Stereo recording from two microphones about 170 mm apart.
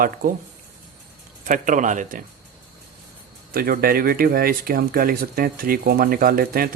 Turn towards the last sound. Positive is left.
turn(degrees=-60)  # may be behind; listen again after turning